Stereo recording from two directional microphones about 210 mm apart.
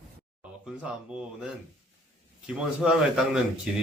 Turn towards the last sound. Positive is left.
turn(degrees=0)  # may be behind; listen again after turning